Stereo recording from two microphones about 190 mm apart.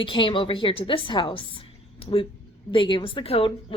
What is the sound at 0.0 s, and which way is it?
A woman's voice, 25° left (ahead or behind).